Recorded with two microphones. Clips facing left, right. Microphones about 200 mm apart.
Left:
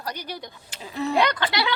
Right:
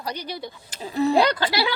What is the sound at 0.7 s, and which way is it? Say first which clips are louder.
Speech: right 5 dB; 35° right (ahead or behind).